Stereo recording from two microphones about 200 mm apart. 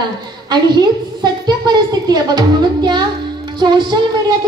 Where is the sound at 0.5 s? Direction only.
20° right (ahead or behind).